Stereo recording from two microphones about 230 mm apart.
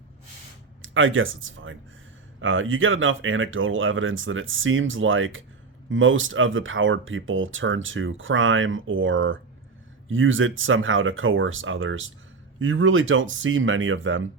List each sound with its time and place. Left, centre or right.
0.8 s speech: right